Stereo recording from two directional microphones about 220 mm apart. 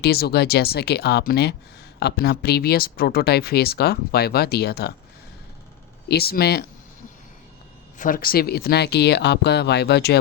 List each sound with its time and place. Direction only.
0.0 s speech: 45° left (ahead or behind)
6.1 s speech: 45° left (ahead or behind)
7.9 s speech: 40° left (ahead or behind)